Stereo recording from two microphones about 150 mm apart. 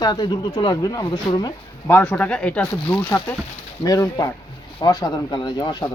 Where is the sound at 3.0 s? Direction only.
20° left (ahead or behind).